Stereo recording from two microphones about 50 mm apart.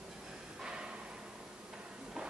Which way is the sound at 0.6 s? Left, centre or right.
Centre.